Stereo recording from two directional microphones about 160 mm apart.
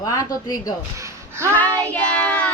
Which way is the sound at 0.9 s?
20° right (ahead or behind).